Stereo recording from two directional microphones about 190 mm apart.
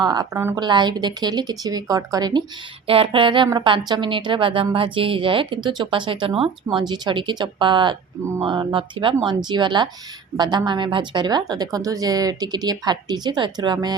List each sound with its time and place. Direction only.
0.0 s a woman's voice: 20° right (ahead or behind)